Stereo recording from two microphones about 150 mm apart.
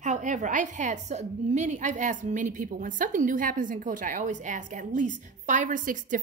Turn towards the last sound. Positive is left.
turn(degrees=-60)  # may be behind; listen again after turning